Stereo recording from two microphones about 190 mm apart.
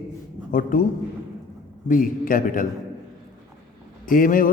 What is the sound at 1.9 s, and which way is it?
Speech, 45° left (ahead or behind).